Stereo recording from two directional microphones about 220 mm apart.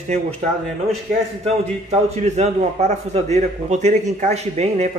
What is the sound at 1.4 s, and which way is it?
A man's voice, 30° right (ahead or behind).